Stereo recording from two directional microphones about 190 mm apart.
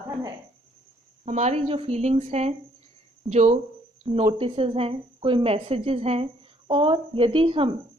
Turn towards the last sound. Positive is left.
turn(degrees=-30)  # may be behind; listen again after turning